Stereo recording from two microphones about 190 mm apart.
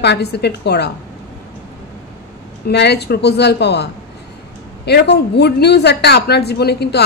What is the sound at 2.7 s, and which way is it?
Speech, 60° left (ahead or behind).